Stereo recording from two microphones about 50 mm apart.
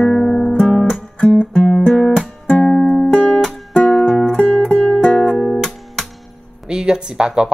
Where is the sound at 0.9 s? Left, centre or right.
Left.